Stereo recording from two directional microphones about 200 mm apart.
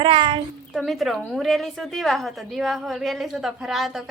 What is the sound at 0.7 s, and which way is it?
A woman's voice, centre (ahead or behind).